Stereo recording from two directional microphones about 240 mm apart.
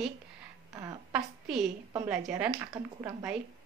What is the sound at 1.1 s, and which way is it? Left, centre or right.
Speech, centre.